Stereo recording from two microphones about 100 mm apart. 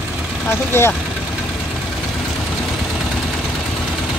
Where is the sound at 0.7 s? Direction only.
25° left (ahead or behind).